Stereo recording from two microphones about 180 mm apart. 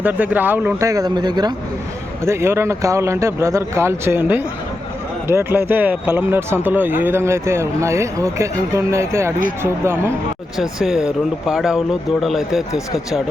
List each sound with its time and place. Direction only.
0.0 s speech: 10° right (ahead or behind)
10.6 s speech: centre (ahead or behind)